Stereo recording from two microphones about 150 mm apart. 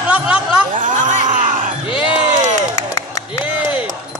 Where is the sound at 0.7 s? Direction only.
60° right (ahead or behind).